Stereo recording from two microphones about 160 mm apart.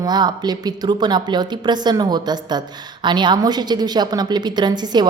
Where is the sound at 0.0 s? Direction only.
25° right (ahead or behind).